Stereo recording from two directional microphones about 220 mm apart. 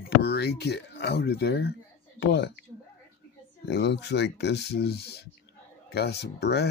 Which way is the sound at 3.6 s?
50° left (ahead or behind).